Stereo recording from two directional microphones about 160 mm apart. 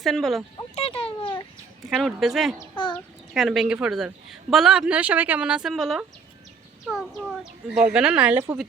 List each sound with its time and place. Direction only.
0.0 s speech: centre (ahead or behind)
0.8 s a sound: 35° left (ahead or behind)
2.0 s speech: centre (ahead or behind)
2.6 s a child's voice: 25° left (ahead or behind)
3.3 s speech: centre (ahead or behind)